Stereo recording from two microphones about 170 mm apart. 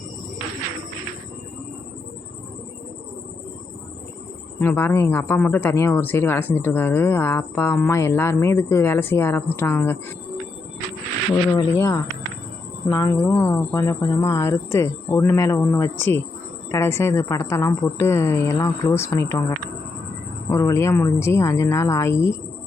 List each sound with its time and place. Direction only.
4.6 s speech: 10° left (ahead or behind)
11.5 s speech: 20° left (ahead or behind)